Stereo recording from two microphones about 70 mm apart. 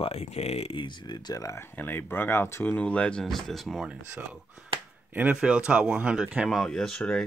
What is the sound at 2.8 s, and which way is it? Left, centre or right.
Speech, centre.